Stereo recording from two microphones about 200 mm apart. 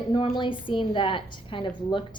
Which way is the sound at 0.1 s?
25° left (ahead or behind).